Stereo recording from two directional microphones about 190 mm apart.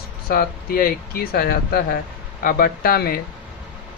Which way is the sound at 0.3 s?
50° left (ahead or behind).